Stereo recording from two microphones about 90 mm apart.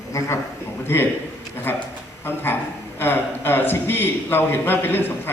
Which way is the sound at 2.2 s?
25° left (ahead or behind).